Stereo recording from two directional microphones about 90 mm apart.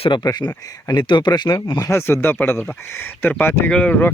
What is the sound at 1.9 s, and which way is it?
Speech, 30° left (ahead or behind).